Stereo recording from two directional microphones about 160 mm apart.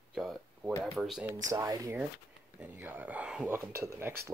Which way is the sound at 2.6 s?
10° right (ahead or behind).